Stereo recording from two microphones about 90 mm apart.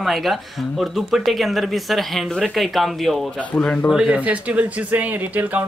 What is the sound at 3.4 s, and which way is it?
Speech, 10° left (ahead or behind).